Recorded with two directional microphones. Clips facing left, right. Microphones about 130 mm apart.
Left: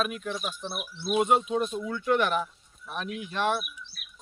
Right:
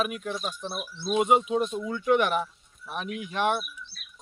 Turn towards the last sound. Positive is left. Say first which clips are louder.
# right 1 dB
turn(degrees=-10)  # may be behind; listen again after turning